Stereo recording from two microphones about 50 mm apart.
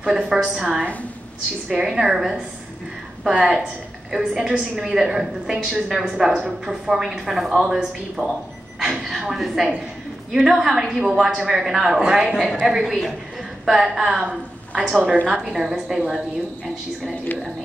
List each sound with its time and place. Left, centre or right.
0.0 s a man's voice: centre